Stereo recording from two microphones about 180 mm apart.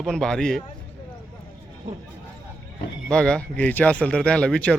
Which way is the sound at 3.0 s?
5° left (ahead or behind).